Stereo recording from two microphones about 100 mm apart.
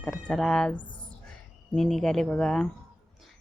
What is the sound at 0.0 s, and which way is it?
Speech, 5° left (ahead or behind).